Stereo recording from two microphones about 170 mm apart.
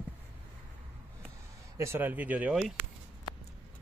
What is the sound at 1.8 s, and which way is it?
Speech, 15° right (ahead or behind).